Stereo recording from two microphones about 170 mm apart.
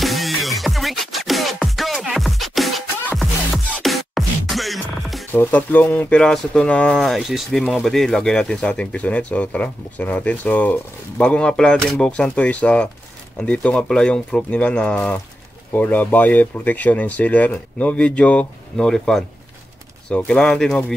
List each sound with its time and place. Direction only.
0.0 s music: centre (ahead or behind)
5.3 s speech: 10° left (ahead or behind)